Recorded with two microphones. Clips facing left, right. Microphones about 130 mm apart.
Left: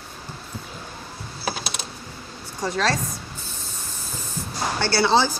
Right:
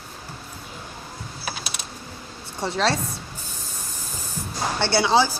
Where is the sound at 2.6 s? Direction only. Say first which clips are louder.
Right 1 dB; 25° right (ahead or behind).